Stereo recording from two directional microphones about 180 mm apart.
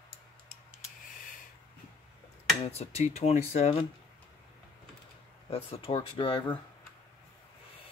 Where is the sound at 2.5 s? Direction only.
35° left (ahead or behind).